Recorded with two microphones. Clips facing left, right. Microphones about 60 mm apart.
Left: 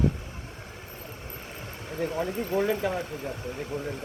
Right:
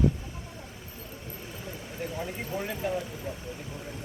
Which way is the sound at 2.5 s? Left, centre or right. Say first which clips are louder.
Left 8 dB; left.